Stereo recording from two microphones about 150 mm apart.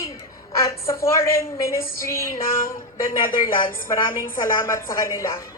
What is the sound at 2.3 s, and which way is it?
A woman's voice, 65° left (ahead or behind).